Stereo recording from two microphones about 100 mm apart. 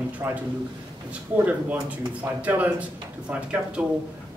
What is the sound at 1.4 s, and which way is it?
Speech, 15° right (ahead or behind).